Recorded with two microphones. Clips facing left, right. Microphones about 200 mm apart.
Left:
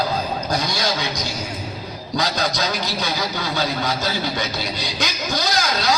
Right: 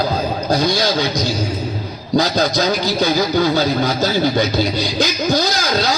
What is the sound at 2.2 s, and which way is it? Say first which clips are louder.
Speech: right 7 dB; 30° right (ahead or behind).